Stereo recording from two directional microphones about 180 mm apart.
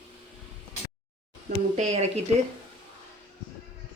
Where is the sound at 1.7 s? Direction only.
40° right (ahead or behind).